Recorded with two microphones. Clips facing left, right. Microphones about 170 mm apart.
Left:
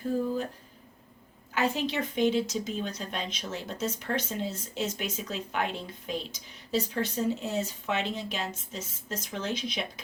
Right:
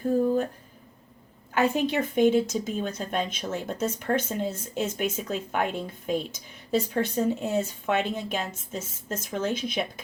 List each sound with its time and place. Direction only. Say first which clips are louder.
1.5 s speech: right 5 dB; 50° right (ahead or behind)